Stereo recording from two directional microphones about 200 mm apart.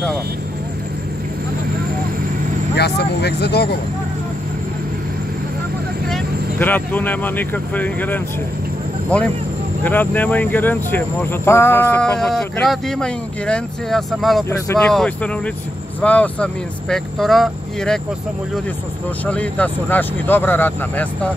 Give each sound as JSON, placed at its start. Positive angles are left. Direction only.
{"t": 2.7, "sound": "speech", "side_deg": 55}
{"t": 6.0, "sound": "speech", "side_deg": 5}
{"t": 9.8, "sound": "speech", "side_deg": 10}
{"t": 14.5, "sound": "speech", "side_deg": 15}
{"t": 19.2, "sound": "speech", "side_deg": 5}